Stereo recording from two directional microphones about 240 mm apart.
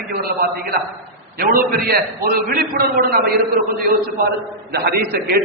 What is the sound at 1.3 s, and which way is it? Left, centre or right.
A man's voice, right.